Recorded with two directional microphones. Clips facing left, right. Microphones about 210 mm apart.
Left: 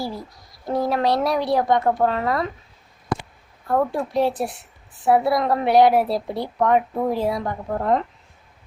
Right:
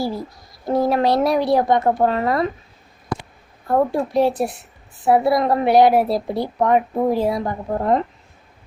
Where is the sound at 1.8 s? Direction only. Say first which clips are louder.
Right 2 dB; 20° right (ahead or behind).